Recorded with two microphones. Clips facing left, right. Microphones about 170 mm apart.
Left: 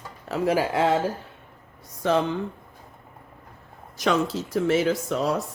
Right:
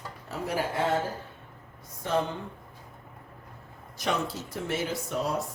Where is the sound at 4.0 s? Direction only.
90° left.